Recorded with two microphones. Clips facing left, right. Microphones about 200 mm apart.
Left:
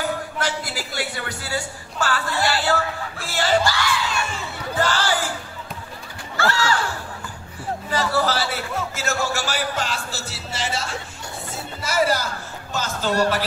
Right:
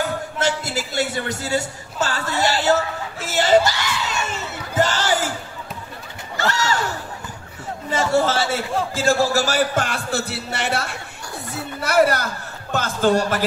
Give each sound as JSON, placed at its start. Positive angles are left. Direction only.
{"t": 0.4, "sound": "a sound", "side_deg": -25}
{"t": 2.0, "sound": "music", "side_deg": -20}
{"t": 6.6, "sound": "speech", "side_deg": -20}
{"t": 7.9, "sound": "a man's voice", "side_deg": -25}
{"t": 9.8, "sound": "speech", "side_deg": -60}